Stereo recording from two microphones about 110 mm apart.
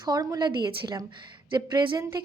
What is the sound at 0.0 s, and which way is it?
A woman's voice, 35° right (ahead or behind).